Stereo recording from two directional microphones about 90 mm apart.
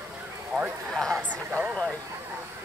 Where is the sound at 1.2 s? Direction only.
20° right (ahead or behind).